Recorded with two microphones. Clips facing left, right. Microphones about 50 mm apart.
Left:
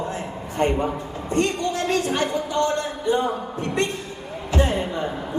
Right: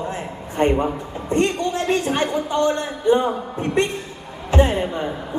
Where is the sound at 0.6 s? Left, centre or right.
Right.